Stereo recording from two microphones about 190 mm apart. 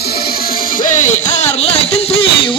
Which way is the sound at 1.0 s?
40° left (ahead or behind).